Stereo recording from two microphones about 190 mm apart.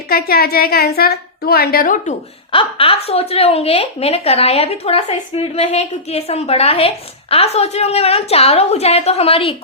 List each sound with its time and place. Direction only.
0.1 s a child's voice: 55° left (ahead or behind)
2.5 s a woman's voice: 30° left (ahead or behind)